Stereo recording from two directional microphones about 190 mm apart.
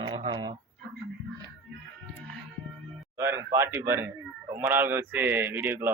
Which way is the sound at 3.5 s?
15° right (ahead or behind).